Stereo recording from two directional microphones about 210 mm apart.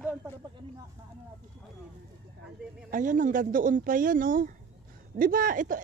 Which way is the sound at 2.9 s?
40° right (ahead or behind).